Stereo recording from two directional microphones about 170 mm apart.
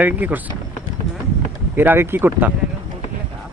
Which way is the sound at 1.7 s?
15° right (ahead or behind).